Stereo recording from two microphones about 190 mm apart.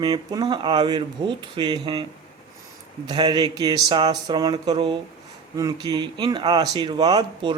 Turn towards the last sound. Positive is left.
turn(degrees=-25)  # may be behind; listen again after turning